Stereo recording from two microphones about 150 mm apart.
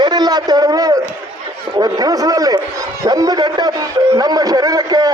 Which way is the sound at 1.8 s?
25° right (ahead or behind).